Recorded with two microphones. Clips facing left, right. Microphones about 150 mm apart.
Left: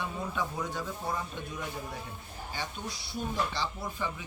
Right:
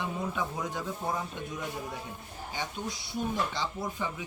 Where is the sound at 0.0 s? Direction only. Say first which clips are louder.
Right 1 dB; 20° right (ahead or behind).